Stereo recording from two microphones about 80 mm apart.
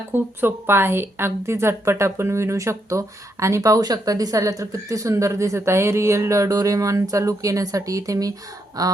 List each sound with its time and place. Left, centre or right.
0.1 s a woman's voice: right